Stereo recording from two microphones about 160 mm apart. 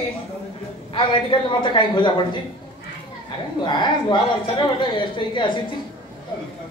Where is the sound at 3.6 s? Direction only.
30° left (ahead or behind).